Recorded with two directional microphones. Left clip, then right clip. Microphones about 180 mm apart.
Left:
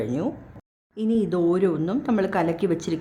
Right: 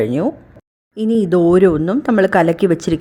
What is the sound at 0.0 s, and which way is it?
Speech, 30° right (ahead or behind).